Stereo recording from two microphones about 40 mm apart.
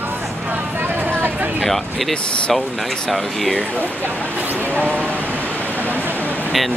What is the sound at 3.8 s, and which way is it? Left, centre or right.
Speech, right.